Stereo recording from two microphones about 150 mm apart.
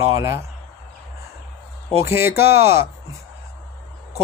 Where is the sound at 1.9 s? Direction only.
15° right (ahead or behind).